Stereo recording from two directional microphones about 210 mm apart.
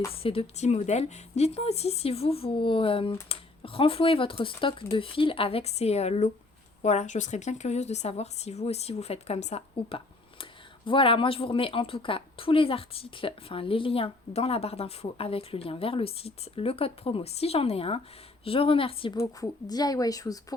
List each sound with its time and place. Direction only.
0.1 s a woman's voice: 25° left (ahead or behind)